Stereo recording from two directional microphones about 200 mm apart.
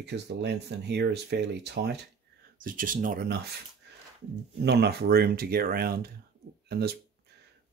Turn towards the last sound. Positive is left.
turn(degrees=-50)  # may be behind; listen again after turning